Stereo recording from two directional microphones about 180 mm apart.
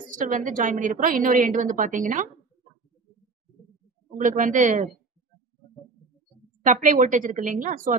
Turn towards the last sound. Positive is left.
turn(degrees=-45)  # may be behind; listen again after turning